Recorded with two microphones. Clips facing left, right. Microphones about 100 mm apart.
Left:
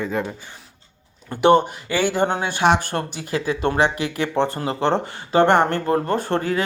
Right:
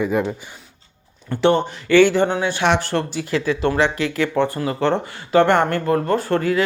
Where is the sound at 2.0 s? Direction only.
45° left (ahead or behind).